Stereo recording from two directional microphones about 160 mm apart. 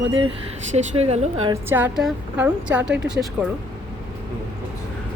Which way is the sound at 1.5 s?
15° right (ahead or behind).